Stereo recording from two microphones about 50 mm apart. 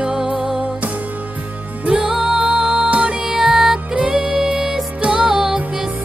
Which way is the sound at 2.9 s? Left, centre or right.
Right.